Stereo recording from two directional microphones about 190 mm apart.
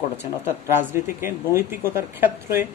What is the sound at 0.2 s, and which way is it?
Speech, 10° right (ahead or behind).